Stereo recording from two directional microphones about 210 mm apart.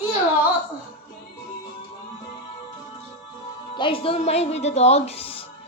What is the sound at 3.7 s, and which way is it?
Speech, 25° left (ahead or behind).